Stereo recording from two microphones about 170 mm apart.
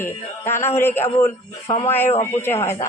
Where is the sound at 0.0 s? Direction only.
15° left (ahead or behind).